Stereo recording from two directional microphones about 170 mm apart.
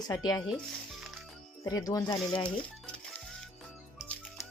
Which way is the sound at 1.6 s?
20° left (ahead or behind).